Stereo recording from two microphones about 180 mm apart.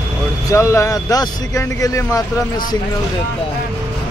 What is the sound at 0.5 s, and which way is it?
Speech, 15° left (ahead or behind).